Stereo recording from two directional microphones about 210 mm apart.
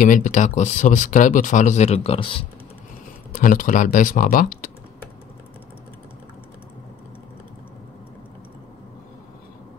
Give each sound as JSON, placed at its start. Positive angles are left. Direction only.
{"t": 0.0, "sound": "speech", "side_deg": 40}
{"t": 3.3, "sound": "speech", "side_deg": 40}